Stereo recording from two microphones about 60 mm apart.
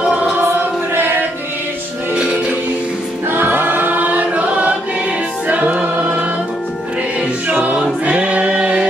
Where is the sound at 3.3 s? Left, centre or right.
Right.